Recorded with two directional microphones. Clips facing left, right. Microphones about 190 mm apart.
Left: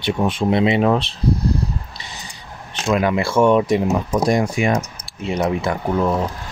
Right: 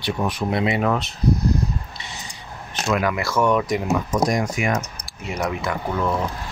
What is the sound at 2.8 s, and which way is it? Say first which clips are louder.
Speech: left 4 dB; 25° left (ahead or behind).